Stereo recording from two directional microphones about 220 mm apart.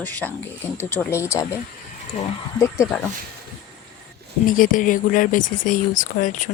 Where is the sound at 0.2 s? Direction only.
Centre (ahead or behind).